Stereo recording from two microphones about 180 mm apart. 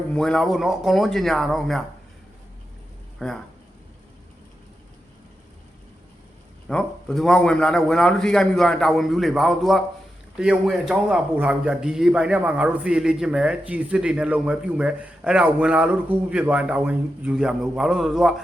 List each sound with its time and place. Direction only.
0.1 s speech: 5° left (ahead or behind)
3.2 s speech: 5° left (ahead or behind)
6.7 s speech: 5° left (ahead or behind)